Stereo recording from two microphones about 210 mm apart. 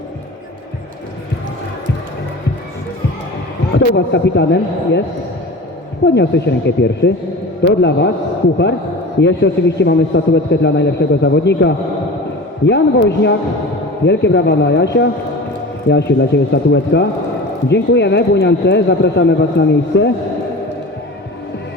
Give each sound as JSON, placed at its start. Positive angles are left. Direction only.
{"t": 3.8, "sound": "a man's voice", "side_deg": 55}
{"t": 6.1, "sound": "a man's voice", "side_deg": 55}
{"t": 9.2, "sound": "a man's voice", "side_deg": 55}